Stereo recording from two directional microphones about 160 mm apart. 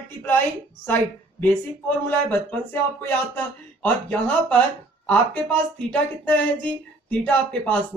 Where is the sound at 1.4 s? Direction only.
10° left (ahead or behind).